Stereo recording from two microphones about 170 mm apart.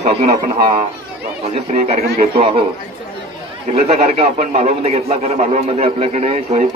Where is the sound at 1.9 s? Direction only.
35° right (ahead or behind).